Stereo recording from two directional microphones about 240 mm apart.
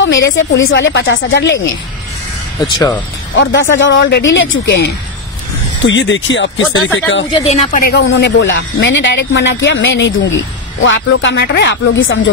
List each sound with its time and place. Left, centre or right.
0.0 s speech: left
3.3 s speech: left
7.4 s speech: left
7.8 s speech: left